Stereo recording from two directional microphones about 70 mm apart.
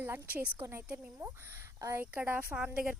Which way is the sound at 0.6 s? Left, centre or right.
Right.